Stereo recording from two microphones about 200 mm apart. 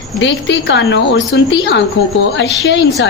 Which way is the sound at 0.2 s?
65° left (ahead or behind).